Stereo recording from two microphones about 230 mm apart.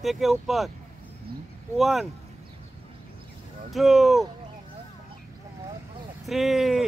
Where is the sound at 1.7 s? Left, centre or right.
Centre.